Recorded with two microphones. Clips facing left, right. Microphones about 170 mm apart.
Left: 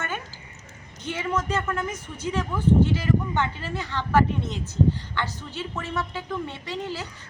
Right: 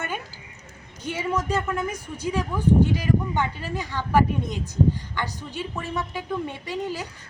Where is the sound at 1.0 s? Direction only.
10° right (ahead or behind).